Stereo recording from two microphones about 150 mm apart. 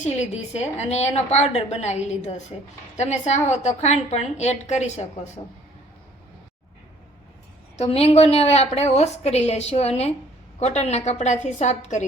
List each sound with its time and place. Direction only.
0.0 s a woman's voice: 50° left (ahead or behind)
7.8 s a woman's voice: 45° left (ahead or behind)